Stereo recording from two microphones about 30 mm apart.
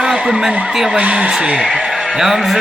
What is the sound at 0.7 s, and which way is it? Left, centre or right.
Speech, centre.